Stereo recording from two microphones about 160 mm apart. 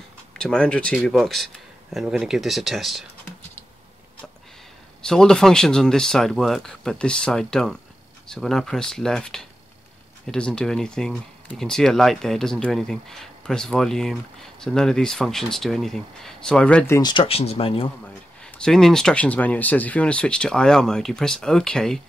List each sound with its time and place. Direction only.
0.4 s speech: 5° left (ahead or behind)
5.0 s speech: 5° left (ahead or behind)
17.0 s speech: 30° left (ahead or behind)
18.4 s speech: 5° left (ahead or behind)